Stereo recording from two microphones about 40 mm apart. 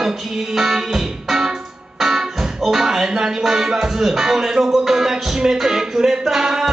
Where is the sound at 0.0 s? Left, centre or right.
Centre.